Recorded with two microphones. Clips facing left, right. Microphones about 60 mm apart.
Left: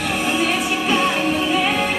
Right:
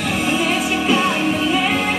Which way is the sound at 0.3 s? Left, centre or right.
Centre.